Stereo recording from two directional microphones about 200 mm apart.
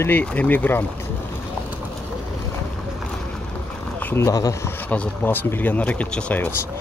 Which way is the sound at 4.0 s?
10° left (ahead or behind).